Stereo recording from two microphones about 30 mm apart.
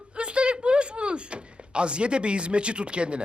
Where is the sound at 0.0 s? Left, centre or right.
Right.